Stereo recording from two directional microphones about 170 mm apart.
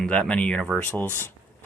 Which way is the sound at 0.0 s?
5° left (ahead or behind).